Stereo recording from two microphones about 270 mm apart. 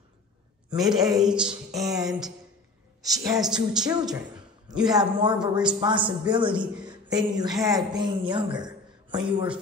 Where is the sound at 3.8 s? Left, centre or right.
Centre.